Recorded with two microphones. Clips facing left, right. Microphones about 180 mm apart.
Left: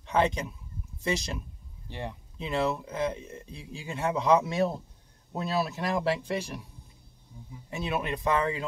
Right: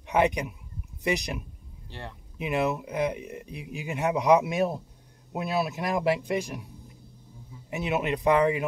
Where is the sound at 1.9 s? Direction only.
15° left (ahead or behind).